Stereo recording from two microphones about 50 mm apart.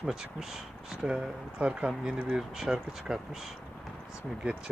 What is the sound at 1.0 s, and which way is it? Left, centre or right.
Speech, right.